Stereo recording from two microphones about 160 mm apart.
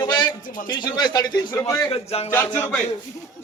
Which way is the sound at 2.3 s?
10° left (ahead or behind).